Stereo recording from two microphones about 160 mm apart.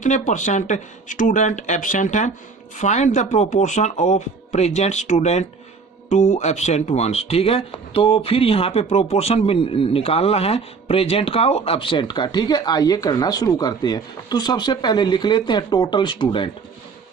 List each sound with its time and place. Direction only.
0.0 s speech: 50° left (ahead or behind); by 16.5 s 30° left (ahead or behind)